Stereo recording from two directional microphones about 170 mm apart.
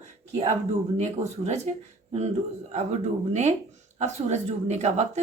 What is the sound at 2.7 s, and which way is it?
A woman's voice, 40° right (ahead or behind).